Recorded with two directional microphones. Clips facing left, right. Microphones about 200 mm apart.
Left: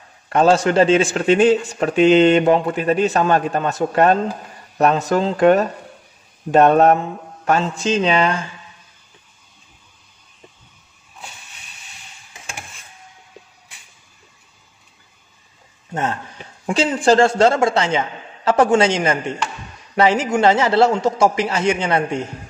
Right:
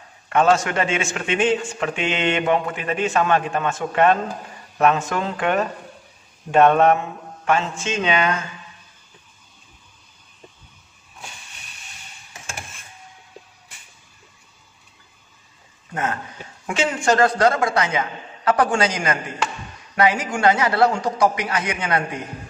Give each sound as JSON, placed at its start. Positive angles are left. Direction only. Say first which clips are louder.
{"t": 0.3, "sound": "a man's voice", "louder": "left 3 dB", "side_deg": 35}
{"t": 15.9, "sound": "a man's voice", "louder": "left 3 dB", "side_deg": 30}